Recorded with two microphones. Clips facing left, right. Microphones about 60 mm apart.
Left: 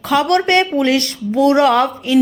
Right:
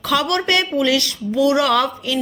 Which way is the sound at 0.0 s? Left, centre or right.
Left.